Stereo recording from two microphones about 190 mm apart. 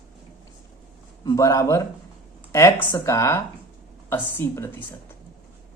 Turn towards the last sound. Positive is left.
turn(degrees=10)  # may be behind; listen again after turning